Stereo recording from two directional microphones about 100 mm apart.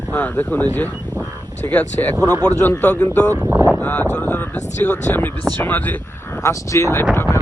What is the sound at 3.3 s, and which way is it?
Speech, 20° right (ahead or behind).